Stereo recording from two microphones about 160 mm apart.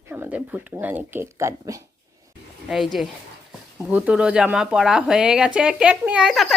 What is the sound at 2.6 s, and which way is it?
Speech, centre (ahead or behind).